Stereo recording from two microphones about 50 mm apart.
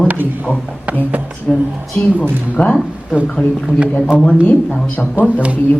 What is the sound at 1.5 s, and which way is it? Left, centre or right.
Speech, centre.